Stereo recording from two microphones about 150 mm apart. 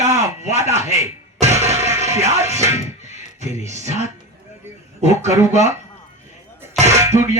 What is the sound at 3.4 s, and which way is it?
Music, 50° right (ahead or behind).